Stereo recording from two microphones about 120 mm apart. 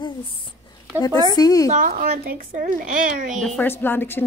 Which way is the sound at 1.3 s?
30° left (ahead or behind).